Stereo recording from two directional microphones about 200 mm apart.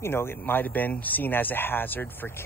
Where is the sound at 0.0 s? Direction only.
10° left (ahead or behind).